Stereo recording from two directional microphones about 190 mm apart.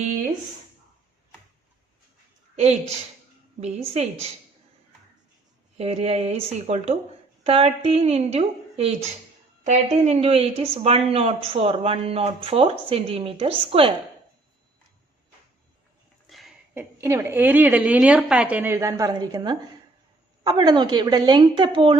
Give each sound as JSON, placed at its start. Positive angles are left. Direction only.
{"t": 3.6, "sound": "speech", "side_deg": -35}
{"t": 5.7, "sound": "speech", "side_deg": -35}
{"t": 16.3, "sound": "a sound", "side_deg": 0}
{"t": 17.0, "sound": "a woman's voice", "side_deg": -15}